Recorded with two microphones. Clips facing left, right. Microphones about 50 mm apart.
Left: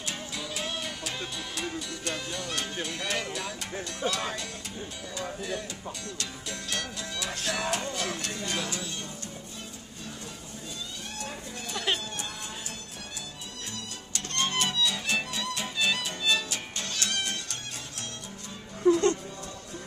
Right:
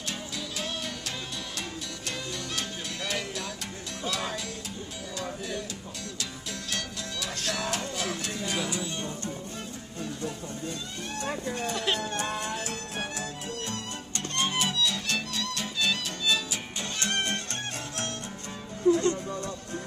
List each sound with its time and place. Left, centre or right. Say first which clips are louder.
0.0 s music: even; centre
4.1 s speech: even; centre
5.1 s music: left 1 dB; centre
6.7 s music: left 1 dB; centre
11.2 s speech: right 7 dB; right
11.7 s speech: left 1 dB; centre
12.0 s music: right 7 dB; right
14.3 s music: even; centre
15.1 s music: left 1 dB; centre
16.9 s music: right 2 dB; right
17.2 s music: right 3 dB; right
18.9 s music: left 1 dB; left